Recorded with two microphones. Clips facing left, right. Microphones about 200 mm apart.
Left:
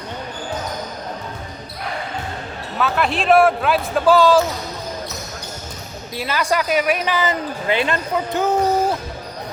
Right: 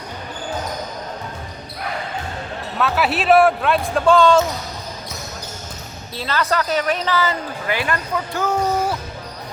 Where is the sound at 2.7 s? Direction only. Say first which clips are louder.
Even; centre (ahead or behind).